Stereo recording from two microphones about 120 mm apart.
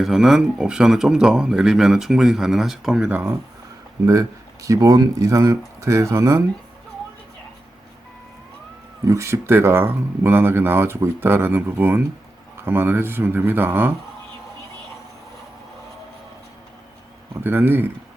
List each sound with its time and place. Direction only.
0.0 s speech: 5° right (ahead or behind)
4.0 s speech: 25° right (ahead or behind)
9.0 s speech: 25° right (ahead or behind)
17.4 s speech: 15° right (ahead or behind)